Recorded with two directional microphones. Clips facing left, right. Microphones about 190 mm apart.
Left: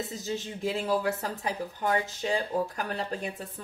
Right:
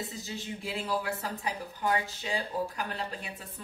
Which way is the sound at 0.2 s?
40° left (ahead or behind).